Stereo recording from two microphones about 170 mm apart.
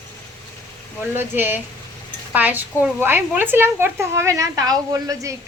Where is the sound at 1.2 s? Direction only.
10° right (ahead or behind).